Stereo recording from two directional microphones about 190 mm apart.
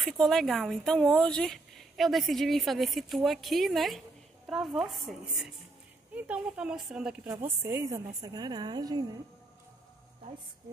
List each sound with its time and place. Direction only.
0.0 s a woman's voice: centre (ahead or behind); by 9.0 s 20° right (ahead or behind)